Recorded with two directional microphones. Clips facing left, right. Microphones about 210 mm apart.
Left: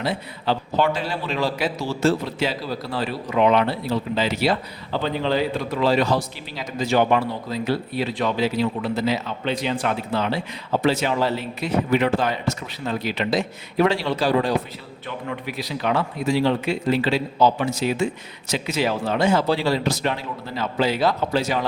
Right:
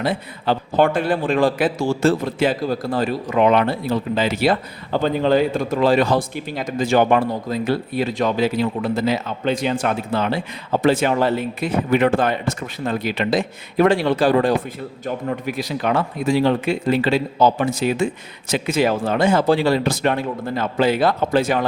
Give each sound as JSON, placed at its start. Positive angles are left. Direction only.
{"t": 0.0, "sound": "a man's voice", "side_deg": -50}